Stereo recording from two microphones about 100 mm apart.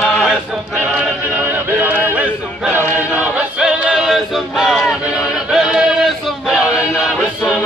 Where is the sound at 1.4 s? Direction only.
20° right (ahead or behind).